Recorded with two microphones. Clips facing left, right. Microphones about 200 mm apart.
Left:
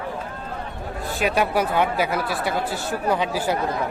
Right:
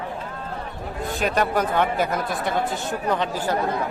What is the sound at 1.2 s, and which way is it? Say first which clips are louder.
Speech: left 1 dB; 5° left (ahead or behind).